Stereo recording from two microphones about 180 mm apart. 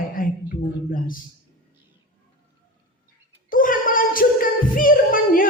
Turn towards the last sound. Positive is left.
turn(degrees=50)  # may be behind; listen again after turning